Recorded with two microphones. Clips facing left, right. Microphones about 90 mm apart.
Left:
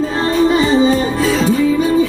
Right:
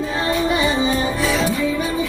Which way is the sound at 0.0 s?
35° left (ahead or behind).